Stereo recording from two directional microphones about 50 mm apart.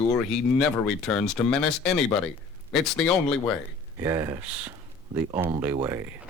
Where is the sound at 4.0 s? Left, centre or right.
Right.